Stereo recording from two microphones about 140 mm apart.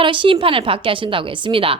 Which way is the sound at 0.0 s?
35° right (ahead or behind).